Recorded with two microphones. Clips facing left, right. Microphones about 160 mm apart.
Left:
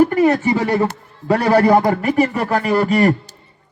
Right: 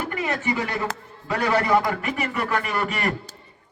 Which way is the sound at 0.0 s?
40° left (ahead or behind).